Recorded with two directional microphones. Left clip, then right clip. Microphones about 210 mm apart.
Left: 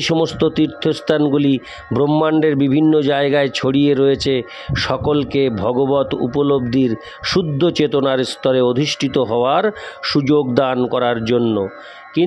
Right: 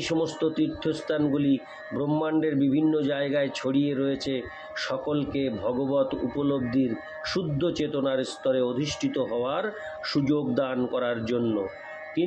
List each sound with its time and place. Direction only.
0.0 s speech: 50° left (ahead or behind)